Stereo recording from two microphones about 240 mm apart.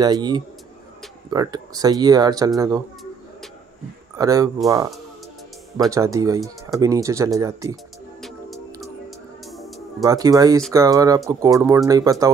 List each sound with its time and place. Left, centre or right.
0.0 s speech: centre
4.2 s speech: centre
5.9 s speech: centre
7.7 s music: centre
10.0 s speech: centre